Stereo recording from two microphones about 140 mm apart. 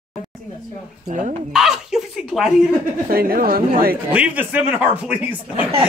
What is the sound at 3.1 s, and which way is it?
Speech, 90° right.